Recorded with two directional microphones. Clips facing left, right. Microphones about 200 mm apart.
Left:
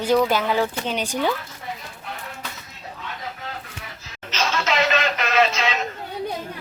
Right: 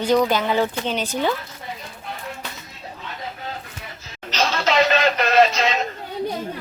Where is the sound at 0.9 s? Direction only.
10° left (ahead or behind).